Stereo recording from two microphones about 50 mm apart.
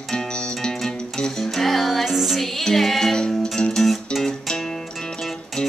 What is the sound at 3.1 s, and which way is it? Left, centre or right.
Music, centre.